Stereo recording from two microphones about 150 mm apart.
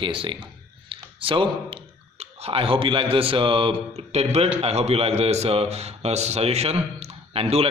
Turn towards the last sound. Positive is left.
turn(degrees=-40)  # may be behind; listen again after turning